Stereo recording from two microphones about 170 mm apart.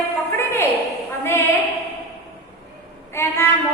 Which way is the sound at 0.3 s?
15° left (ahead or behind).